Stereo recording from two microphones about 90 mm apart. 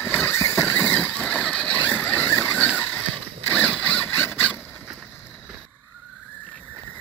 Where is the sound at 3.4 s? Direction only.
15° left (ahead or behind).